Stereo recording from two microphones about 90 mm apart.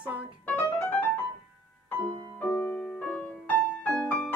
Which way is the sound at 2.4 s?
15° left (ahead or behind).